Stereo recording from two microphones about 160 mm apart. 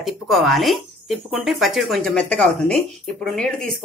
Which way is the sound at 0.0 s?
Centre (ahead or behind).